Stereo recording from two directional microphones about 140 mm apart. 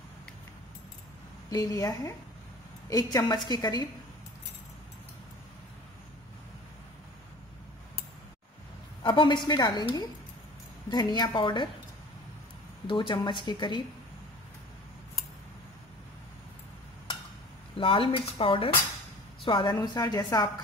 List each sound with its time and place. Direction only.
1.5 s a woman's voice: 25° left (ahead or behind)
9.0 s speech: 35° left (ahead or behind)
12.8 s speech: 35° left (ahead or behind)
17.7 s speech: 40° left (ahead or behind)